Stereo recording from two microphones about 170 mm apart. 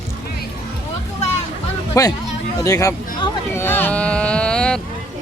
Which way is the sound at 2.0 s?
20° left (ahead or behind).